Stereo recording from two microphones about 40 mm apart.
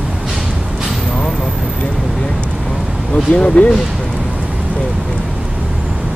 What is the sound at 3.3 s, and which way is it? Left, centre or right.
Speech, left.